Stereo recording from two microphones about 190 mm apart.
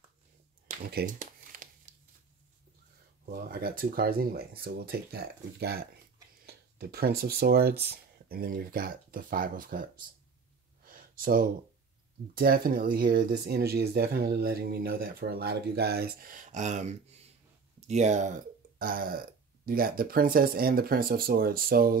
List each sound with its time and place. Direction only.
0.8 s speech: 55° right (ahead or behind)
1.2 s crumpling: 45° right (ahead or behind)
3.3 s speech: 50° right (ahead or behind)
10.8 s a sound: 50° right (ahead or behind)
12.4 s speech: 50° right (ahead or behind)